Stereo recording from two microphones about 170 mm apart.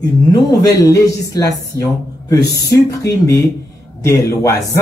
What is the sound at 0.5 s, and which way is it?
A man's voice, 20° left (ahead or behind).